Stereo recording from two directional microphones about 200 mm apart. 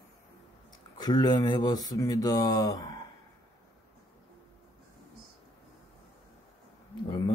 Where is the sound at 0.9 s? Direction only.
20° left (ahead or behind).